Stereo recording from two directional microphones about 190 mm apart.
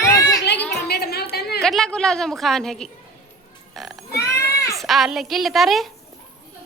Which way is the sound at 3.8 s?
Centre (ahead or behind).